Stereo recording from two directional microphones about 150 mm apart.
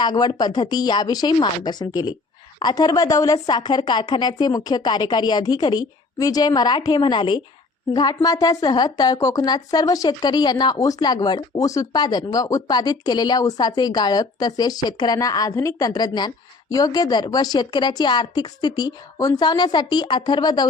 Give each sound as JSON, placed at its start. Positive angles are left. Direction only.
{"t": 0.0, "sound": "a woman's voice", "side_deg": 30}